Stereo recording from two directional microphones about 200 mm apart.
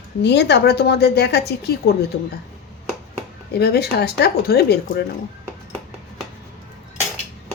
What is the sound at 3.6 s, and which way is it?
Speech, 55° left (ahead or behind).